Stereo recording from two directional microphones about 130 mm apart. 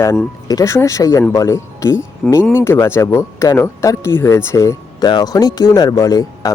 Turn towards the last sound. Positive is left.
turn(degrees=25)  # may be behind; listen again after turning